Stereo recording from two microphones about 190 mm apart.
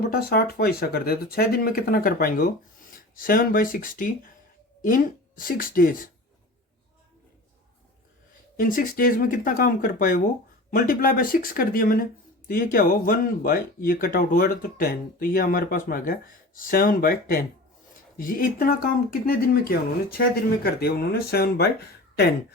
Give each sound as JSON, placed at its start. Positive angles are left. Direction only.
{"t": 0.1, "sound": "speech", "side_deg": 55}
{"t": 8.5, "sound": "speech", "side_deg": 45}